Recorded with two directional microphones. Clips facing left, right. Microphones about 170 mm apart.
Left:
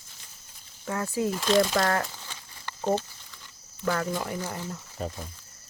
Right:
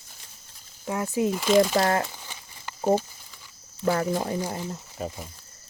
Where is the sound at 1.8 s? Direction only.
20° right (ahead or behind).